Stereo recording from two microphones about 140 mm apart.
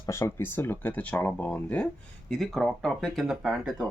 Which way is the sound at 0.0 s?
20° left (ahead or behind).